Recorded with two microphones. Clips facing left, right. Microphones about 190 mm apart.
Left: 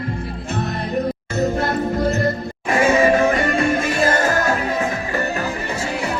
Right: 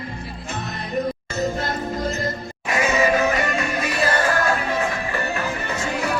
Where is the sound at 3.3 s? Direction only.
50° left (ahead or behind).